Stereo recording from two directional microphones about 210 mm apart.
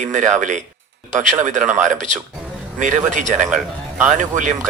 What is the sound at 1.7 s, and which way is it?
Speech, 35° right (ahead or behind).